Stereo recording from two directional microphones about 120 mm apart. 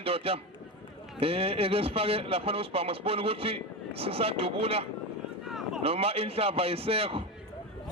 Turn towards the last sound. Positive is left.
turn(degrees=-55)  # may be behind; listen again after turning